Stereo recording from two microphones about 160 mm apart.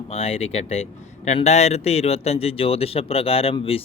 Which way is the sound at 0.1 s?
40° left (ahead or behind).